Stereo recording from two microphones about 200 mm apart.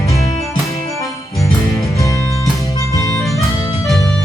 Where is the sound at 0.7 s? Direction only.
15° left (ahead or behind).